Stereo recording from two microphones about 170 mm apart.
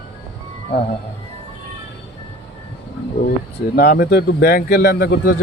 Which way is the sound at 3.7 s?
65° left (ahead or behind).